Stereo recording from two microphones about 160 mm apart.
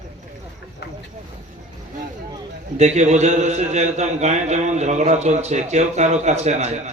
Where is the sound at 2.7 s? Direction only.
45° right (ahead or behind).